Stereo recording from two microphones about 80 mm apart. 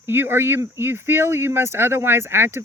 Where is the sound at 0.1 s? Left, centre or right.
Right.